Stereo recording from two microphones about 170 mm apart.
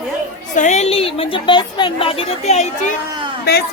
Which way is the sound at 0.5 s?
45° left (ahead or behind).